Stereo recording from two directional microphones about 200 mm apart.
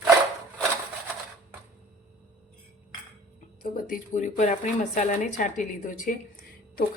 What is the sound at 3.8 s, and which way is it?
A woman's voice, 40° left (ahead or behind).